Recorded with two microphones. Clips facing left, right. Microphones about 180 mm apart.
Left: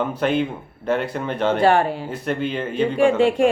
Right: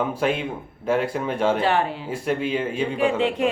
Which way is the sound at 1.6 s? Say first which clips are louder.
Left 5 dB; 45° left (ahead or behind).